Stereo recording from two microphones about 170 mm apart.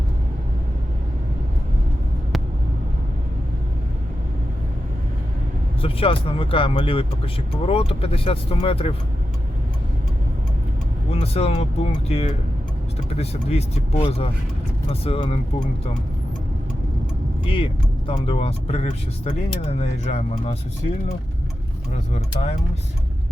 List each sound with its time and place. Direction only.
5.8 s speech: 35° left (ahead or behind)
11.1 s speech: 35° left (ahead or behind)
17.4 s speech: 30° left (ahead or behind)
21.9 s speech: 40° left (ahead or behind)